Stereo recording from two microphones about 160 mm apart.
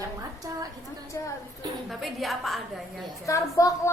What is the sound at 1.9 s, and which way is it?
Speech, centre (ahead or behind).